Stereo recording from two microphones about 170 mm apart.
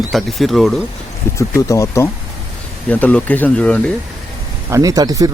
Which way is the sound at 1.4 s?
20° left (ahead or behind).